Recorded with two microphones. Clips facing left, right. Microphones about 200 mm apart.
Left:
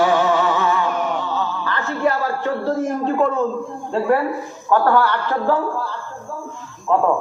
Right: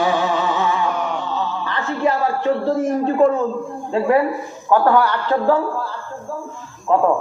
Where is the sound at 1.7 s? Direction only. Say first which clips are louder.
Right 1 dB; 20° right (ahead or behind).